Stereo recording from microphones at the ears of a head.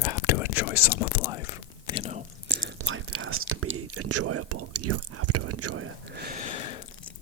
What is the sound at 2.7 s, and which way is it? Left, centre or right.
Whispering, right.